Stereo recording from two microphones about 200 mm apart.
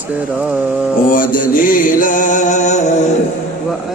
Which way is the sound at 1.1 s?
45° left (ahead or behind).